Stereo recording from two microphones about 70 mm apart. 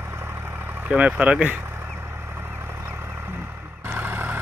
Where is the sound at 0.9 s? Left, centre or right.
Centre.